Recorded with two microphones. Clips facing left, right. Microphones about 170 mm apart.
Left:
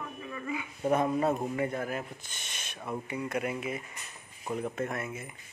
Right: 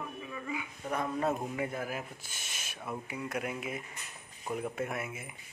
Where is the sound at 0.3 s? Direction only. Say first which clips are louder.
Left 4 dB; centre (ahead or behind).